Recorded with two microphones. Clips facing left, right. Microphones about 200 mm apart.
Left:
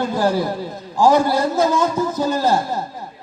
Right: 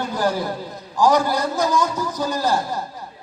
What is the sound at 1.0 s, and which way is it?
A man's voice, 20° left (ahead or behind).